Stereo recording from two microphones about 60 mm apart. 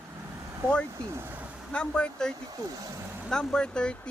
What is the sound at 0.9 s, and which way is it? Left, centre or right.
Speech, right.